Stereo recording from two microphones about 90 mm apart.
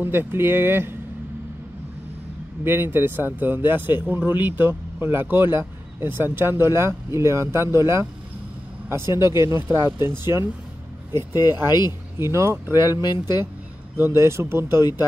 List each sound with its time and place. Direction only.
0.0 s speech: 25° right (ahead or behind)
2.6 s speech: 25° right (ahead or behind)
12.2 s speech: 30° right (ahead or behind)
13.0 s speech: 50° left (ahead or behind)
13.9 s speech: 30° right (ahead or behind)